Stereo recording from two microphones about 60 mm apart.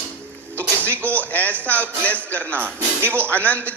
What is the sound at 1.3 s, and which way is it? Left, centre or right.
A man's voice, left.